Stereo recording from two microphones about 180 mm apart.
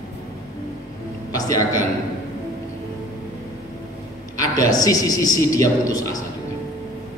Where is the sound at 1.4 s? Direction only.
20° left (ahead or behind).